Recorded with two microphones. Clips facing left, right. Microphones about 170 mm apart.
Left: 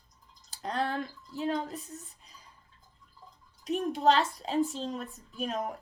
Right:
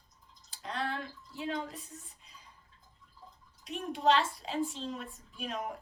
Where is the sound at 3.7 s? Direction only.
40° left (ahead or behind).